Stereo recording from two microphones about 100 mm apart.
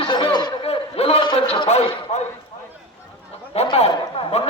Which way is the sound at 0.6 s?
85° left.